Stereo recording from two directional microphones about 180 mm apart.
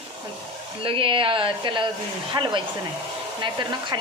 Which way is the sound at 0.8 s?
30° right (ahead or behind).